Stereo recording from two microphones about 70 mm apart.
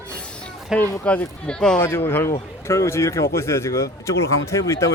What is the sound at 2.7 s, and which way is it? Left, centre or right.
Speech, left.